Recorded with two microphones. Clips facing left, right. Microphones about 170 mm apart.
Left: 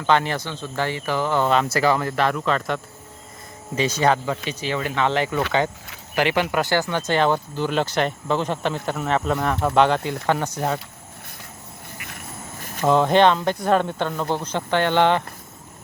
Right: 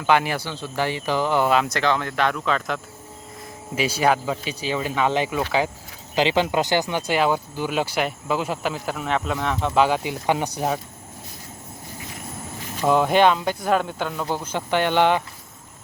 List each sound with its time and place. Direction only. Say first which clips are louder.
0.0 s speech: even; 10° right (ahead or behind)
1.7 s speech: left 3 dB; 5° left (ahead or behind)
6.1 s speech: right 1 dB; 20° right (ahead or behind)
11.9 s a sound: right 2 dB; 60° left (ahead or behind)
12.8 s speech: left 1 dB; 10° right (ahead or behind)